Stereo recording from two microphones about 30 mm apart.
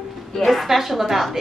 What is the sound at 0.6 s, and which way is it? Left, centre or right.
Speech, centre.